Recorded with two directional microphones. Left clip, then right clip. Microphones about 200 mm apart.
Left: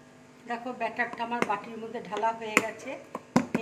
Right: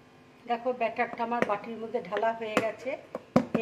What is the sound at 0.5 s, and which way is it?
Speech, 45° right (ahead or behind).